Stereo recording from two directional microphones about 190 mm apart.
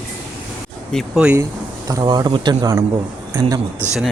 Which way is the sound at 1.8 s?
20° right (ahead or behind).